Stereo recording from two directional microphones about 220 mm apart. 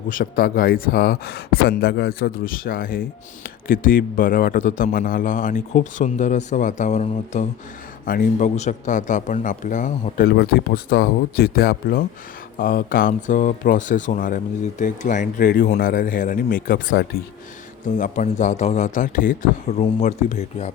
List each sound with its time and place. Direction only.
0.1 s speech: 40° left (ahead or behind)